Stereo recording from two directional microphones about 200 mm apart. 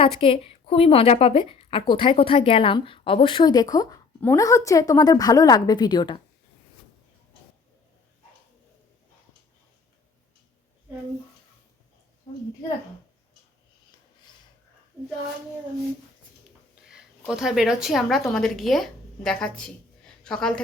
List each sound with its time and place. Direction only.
0.0 s a woman's voice: 25° left (ahead or behind)
16.9 s a woman's voice: centre (ahead or behind)